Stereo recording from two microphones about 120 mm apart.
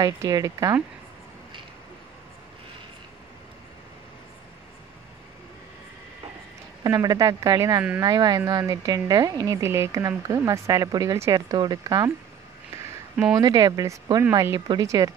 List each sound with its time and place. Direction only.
0.0 s speech: 30° right (ahead or behind)
6.8 s speech: 35° right (ahead or behind)
13.4 s speech: 35° right (ahead or behind)